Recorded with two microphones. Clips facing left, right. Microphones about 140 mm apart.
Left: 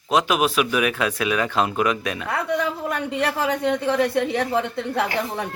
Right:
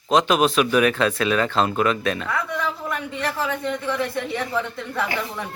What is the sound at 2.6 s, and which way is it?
A woman's voice, 65° left (ahead or behind).